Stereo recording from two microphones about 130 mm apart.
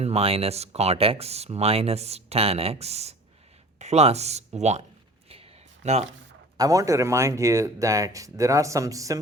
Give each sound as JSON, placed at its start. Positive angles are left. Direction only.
{"t": 0.0, "sound": "speech", "side_deg": -50}
{"t": 5.3, "sound": "a sound", "side_deg": -50}
{"t": 6.6, "sound": "speech", "side_deg": -25}